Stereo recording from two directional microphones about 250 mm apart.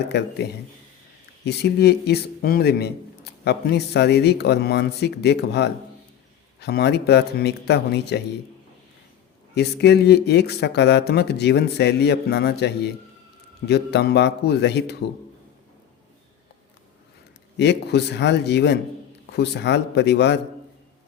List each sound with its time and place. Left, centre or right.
0.1 s speech: left
1.5 s speech: left
9.6 s speech: left
17.6 s speech: left